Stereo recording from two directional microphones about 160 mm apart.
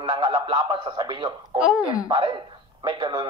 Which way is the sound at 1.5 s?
Centre (ahead or behind).